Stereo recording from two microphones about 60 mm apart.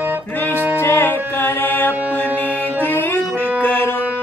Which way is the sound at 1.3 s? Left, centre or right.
Left.